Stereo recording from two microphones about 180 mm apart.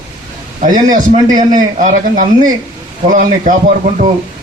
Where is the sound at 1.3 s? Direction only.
45° right (ahead or behind).